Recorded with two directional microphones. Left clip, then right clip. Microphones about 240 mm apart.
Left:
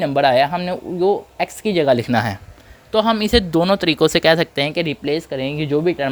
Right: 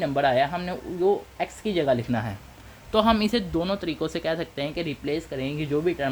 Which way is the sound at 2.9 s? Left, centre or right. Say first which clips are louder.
Left 4 dB; centre.